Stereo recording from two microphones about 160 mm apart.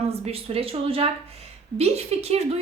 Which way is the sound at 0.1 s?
40° right (ahead or behind).